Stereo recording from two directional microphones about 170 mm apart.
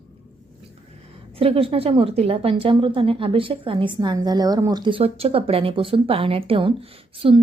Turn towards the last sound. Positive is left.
turn(degrees=-35)  # may be behind; listen again after turning